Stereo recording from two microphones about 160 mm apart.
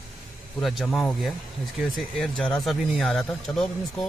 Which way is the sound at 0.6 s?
Centre (ahead or behind).